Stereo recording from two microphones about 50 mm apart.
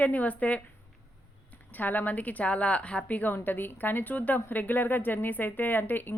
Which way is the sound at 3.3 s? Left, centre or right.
Left.